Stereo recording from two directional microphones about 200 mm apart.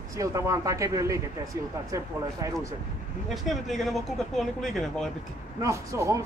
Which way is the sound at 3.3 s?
Centre (ahead or behind).